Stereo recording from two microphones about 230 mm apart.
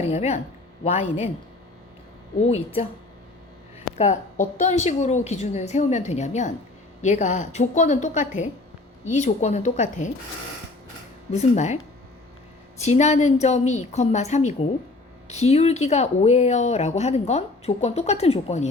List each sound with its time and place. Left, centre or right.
0.0 s speech: left
2.4 s speech: left
3.9 s a woman's voice: left
11.3 s speech: left
12.8 s speech: left